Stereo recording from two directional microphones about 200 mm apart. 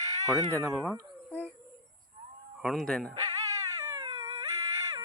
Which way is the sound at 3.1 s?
15° right (ahead or behind).